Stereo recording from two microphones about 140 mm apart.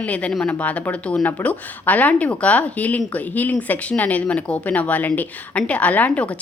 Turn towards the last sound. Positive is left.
turn(degrees=10)  # may be behind; listen again after turning